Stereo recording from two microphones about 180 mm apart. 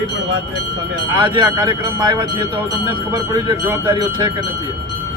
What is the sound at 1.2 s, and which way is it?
Speech, 25° right (ahead or behind).